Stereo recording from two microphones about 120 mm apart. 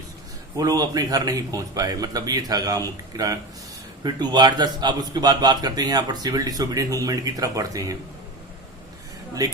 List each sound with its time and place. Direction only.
0.5 s a man's voice: 30° right (ahead or behind)